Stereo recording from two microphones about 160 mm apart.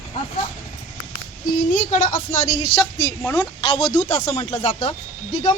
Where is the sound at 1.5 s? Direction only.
50° left (ahead or behind).